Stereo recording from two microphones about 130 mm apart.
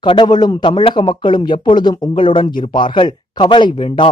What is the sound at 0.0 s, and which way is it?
A man's voice, 40° left (ahead or behind).